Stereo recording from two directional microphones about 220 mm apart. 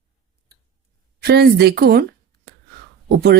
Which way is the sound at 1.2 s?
45° right (ahead or behind).